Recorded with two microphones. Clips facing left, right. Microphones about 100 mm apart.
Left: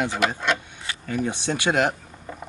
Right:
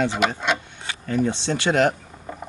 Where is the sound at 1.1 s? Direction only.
15° left (ahead or behind).